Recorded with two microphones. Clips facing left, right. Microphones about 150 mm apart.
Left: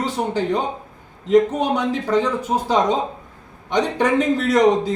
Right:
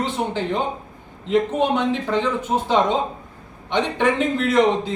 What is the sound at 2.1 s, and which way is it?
A man's voice, 40° left (ahead or behind).